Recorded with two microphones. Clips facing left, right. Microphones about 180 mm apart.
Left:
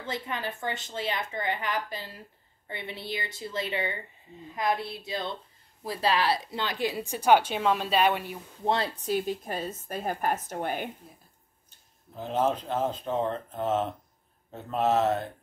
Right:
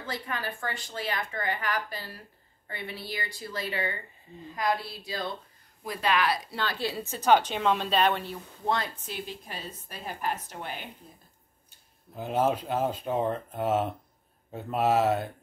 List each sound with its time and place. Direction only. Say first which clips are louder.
0.0 s a woman's voice: left 1 dB; 20° left (ahead or behind)
8.6 s speech: left 3 dB; 30° left (ahead or behind); by 10.9 s 50° left (ahead or behind)
12.2 s speech: right 1 dB; 10° right (ahead or behind)